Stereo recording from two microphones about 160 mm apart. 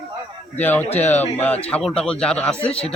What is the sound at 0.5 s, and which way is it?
Speech, 10° left (ahead or behind).